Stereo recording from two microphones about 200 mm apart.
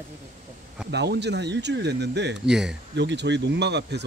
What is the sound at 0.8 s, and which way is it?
Speech, 55° right (ahead or behind).